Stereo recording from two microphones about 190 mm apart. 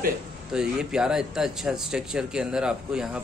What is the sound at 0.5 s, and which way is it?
Speech, 5° right (ahead or behind).